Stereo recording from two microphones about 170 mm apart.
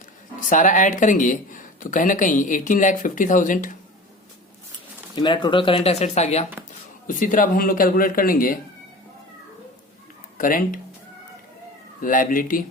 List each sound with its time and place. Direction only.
0.3 s speech: 50° left (ahead or behind)
5.1 s speech: 25° left (ahead or behind)
7.1 s speech: 50° left (ahead or behind)
10.3 s speech: 50° left (ahead or behind)
11.9 s speech: 50° left (ahead or behind)